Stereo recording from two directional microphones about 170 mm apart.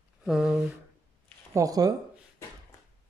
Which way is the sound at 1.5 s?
20° right (ahead or behind).